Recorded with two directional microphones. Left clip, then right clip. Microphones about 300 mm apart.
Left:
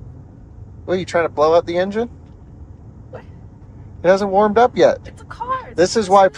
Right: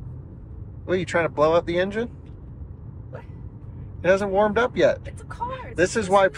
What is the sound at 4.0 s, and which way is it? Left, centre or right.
Speech, centre.